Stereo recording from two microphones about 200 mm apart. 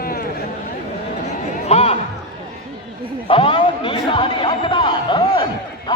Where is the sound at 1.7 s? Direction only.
30° left (ahead or behind).